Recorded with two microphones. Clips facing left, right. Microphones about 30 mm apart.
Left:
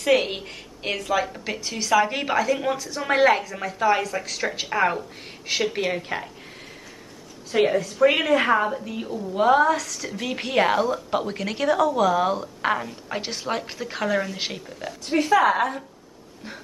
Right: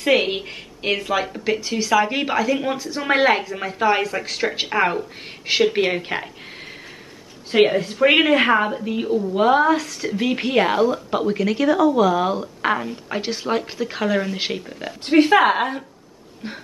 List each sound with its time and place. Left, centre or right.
0.0 s a woman's voice: right
1.3 s a woman's voice: centre; by 6.2 s right
7.5 s a woman's voice: right
15.0 s speech: right
15.5 s a woman's voice: right